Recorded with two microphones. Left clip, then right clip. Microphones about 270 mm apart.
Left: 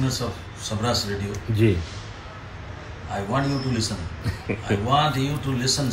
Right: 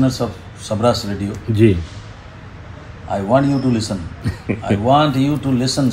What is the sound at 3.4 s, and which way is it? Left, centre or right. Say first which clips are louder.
Speech: right 7 dB; centre.